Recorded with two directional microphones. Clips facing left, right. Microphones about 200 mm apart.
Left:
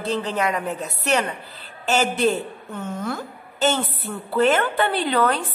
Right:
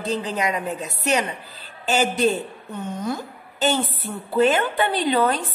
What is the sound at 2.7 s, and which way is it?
Speech, 15° right (ahead or behind).